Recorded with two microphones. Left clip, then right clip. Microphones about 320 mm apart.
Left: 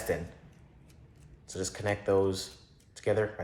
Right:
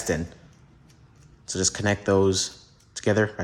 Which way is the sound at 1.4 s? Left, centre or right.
Right.